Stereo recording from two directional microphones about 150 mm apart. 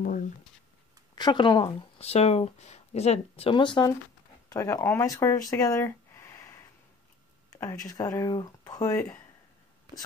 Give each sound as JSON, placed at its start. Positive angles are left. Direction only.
{"t": 1.1, "sound": "speech", "side_deg": 30}
{"t": 4.5, "sound": "speech", "side_deg": 20}